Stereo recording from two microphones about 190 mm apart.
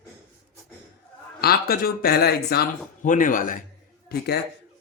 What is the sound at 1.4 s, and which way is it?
Speech, 55° left (ahead or behind).